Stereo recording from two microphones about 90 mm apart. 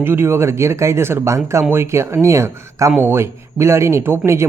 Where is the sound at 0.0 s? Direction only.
25° right (ahead or behind).